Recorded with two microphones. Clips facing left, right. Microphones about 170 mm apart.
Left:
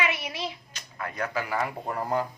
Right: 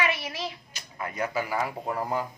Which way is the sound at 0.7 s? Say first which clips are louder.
Right 1 dB; 10° right (ahead or behind).